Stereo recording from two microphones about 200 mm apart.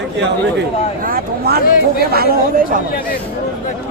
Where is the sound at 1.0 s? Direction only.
50° right (ahead or behind).